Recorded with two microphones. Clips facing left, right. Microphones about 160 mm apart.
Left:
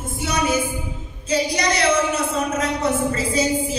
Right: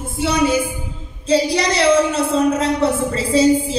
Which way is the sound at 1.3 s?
30° right (ahead or behind).